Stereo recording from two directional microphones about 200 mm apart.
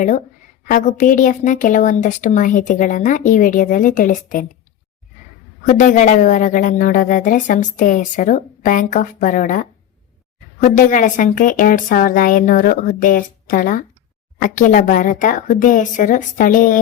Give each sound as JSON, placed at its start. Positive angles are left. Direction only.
{"t": 0.7, "sound": "a woman's voice", "side_deg": 40}
{"t": 5.6, "sound": "a woman's voice", "side_deg": 40}